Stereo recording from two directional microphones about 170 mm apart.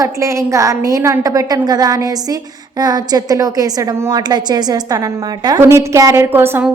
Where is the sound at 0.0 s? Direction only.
20° right (ahead or behind).